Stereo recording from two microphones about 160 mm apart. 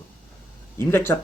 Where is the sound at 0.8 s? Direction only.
15° left (ahead or behind).